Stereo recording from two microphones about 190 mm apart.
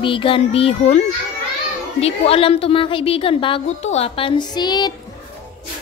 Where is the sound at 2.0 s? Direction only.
30° left (ahead or behind).